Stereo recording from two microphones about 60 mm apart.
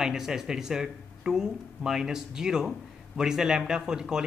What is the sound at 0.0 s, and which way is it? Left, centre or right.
Speech, centre.